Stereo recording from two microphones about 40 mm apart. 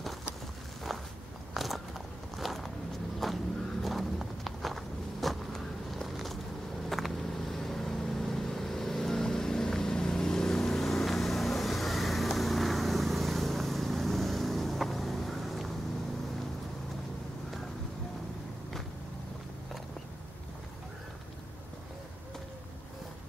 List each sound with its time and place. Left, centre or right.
1.5 s walk: centre
3.2 s vehicle: centre
3.8 s walk: centre
6.0 s vehicle: centre